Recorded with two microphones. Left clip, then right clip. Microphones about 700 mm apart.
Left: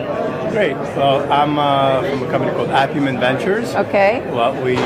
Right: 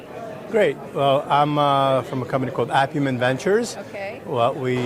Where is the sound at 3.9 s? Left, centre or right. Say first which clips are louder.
Left 17 dB; left.